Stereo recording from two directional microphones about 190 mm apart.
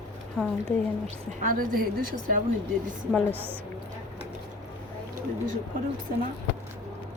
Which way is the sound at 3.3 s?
10° right (ahead or behind).